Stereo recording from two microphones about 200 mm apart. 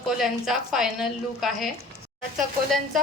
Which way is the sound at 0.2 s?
Centre (ahead or behind).